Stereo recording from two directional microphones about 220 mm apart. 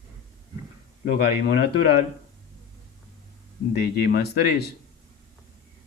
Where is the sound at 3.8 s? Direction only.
45° left (ahead or behind).